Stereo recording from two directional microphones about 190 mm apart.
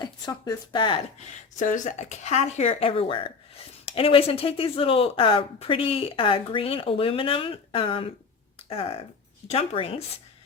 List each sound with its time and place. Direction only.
0.0 s speech: 20° left (ahead or behind)
1.5 s speech: 40° left (ahead or behind)